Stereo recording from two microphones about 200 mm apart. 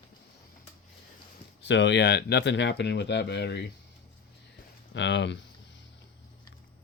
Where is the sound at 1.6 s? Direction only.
60° left (ahead or behind).